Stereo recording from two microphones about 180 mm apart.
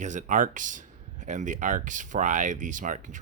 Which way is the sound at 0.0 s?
45° right (ahead or behind).